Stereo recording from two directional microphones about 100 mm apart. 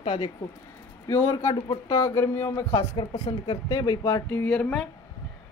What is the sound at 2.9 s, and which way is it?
A woman's voice, 45° left (ahead or behind).